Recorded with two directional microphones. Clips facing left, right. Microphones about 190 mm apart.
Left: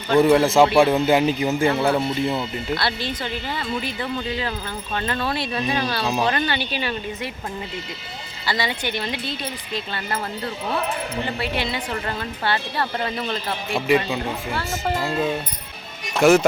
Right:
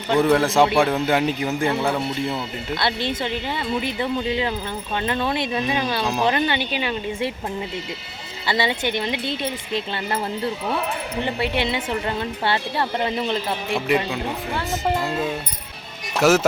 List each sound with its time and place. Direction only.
0.2 s a man's voice: centre (ahead or behind)
2.7 s a woman's voice: 20° right (ahead or behind)
6.0 s a man's voice: centre (ahead or behind)
6.2 s a woman's voice: 20° right (ahead or behind)
8.4 s a woman's voice: 25° right (ahead or behind)
11.3 s a woman's voice: 20° right (ahead or behind)
13.7 s a man's voice: centre (ahead or behind)
14.5 s speech: 15° right (ahead or behind)
15.0 s a man's voice: centre (ahead or behind)